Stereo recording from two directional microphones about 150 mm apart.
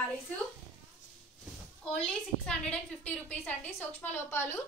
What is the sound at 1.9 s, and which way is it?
A woman's voice, 5° left (ahead or behind).